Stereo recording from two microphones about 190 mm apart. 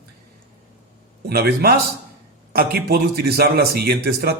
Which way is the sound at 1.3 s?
55° right (ahead or behind).